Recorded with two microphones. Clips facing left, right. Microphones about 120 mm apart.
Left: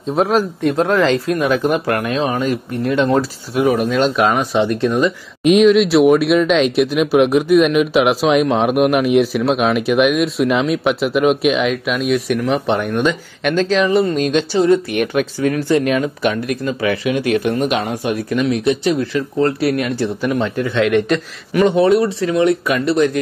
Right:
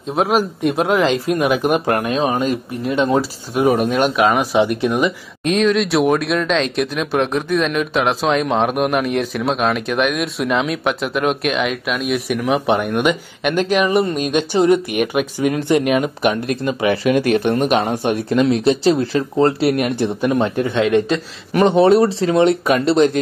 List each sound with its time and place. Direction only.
0.1 s speech: centre (ahead or behind)
0.4 s speech: 15° right (ahead or behind)
3.5 s speech: 30° right (ahead or behind)
4.2 s speech: 5° right (ahead or behind)
5.4 s speech: 5° left (ahead or behind); by 17.1 s 30° right (ahead or behind)
17.1 s speech: 45° right (ahead or behind)
17.6 s speech: 30° right (ahead or behind)